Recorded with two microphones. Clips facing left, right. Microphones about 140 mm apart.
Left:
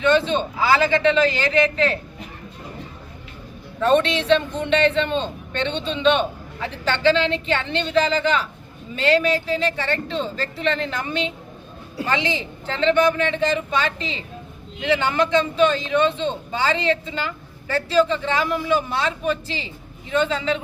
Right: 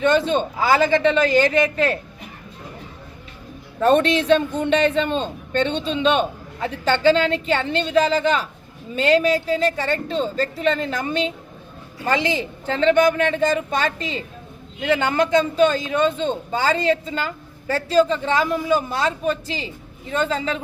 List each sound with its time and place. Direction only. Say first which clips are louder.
0.0 s speech: right 1 dB; 45° right (ahead or behind)
3.8 s a man's voice: right 2 dB; 45° right (ahead or behind)